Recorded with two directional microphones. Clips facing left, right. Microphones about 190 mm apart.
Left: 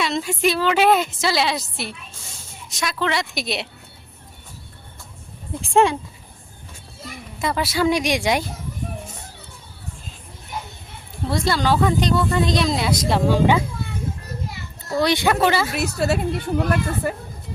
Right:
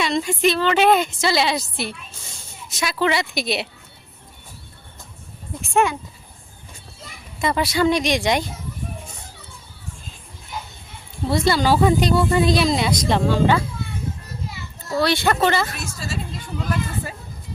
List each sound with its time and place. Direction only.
0.0 s speech: centre (ahead or behind)
5.6 s speech: 30° left (ahead or behind)
7.4 s speech: 5° left (ahead or behind)
11.3 s speech: centre (ahead or behind)
14.9 s speech: 15° left (ahead or behind)
15.8 s a child's voice: 65° left (ahead or behind)